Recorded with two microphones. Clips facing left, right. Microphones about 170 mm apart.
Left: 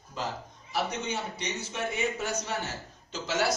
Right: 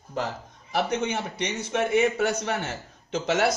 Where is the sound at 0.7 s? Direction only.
65° right (ahead or behind).